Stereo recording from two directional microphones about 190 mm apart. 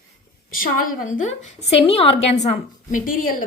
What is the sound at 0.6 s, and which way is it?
Speech, 45° left (ahead or behind).